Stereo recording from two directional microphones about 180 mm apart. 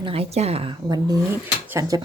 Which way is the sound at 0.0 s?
30° right (ahead or behind).